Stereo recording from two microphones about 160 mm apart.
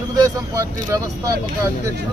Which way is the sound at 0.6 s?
20° right (ahead or behind).